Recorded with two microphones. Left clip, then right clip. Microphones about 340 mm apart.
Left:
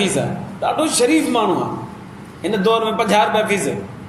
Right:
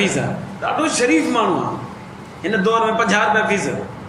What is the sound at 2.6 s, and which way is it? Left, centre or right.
A man's voice, centre.